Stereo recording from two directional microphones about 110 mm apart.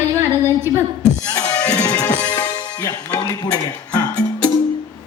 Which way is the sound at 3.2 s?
40° left (ahead or behind).